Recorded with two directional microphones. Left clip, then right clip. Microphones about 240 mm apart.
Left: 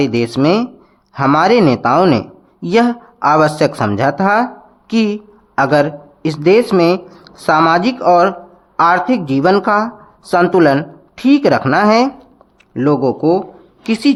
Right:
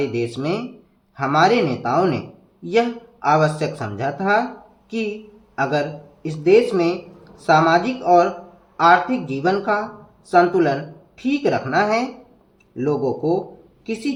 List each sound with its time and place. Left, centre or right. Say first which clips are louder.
0.0 s speech: left 9 dB; left
5.5 s speech: left 9 dB; left